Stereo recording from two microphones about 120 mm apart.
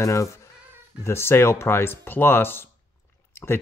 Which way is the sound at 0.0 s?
25° left (ahead or behind).